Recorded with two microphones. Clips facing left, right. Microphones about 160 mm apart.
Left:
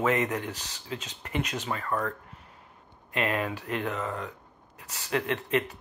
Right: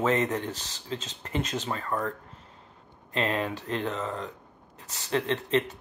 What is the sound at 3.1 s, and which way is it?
Speech, 25° right (ahead or behind).